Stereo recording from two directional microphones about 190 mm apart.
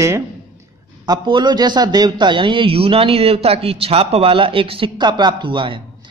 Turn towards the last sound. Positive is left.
turn(degrees=-25)  # may be behind; listen again after turning